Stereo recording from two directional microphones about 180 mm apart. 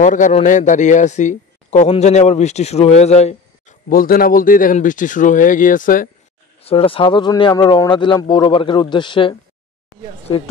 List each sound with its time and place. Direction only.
0.0 s a man's voice: 45° left (ahead or behind)
3.9 s speech: 55° left (ahead or behind)
6.6 s speech: 30° left (ahead or behind)